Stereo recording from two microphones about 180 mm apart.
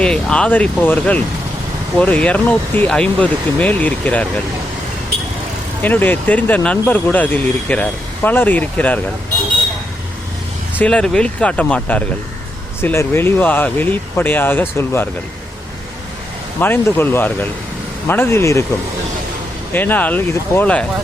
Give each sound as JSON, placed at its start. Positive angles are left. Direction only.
{"t": 0.0, "sound": "speech", "side_deg": 5}
{"t": 5.8, "sound": "speech", "side_deg": 10}
{"t": 10.8, "sound": "speech", "side_deg": 5}
{"t": 16.6, "sound": "speech", "side_deg": 10}
{"t": 19.7, "sound": "speech", "side_deg": 10}